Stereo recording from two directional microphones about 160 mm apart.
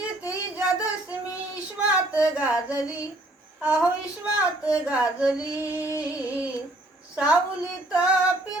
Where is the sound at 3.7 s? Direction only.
5° right (ahead or behind).